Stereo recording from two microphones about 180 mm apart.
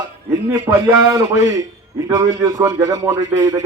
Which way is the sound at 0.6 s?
20° right (ahead or behind).